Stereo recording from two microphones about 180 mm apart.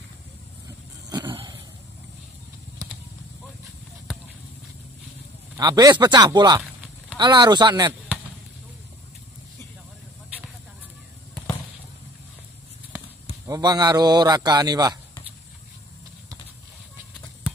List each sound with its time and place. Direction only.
1.1 s vehicle: 25° right (ahead or behind)
5.6 s a man's voice: 20° right (ahead or behind)
13.5 s a man's voice: 20° right (ahead or behind)